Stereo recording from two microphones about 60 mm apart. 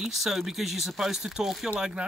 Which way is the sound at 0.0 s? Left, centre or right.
Centre.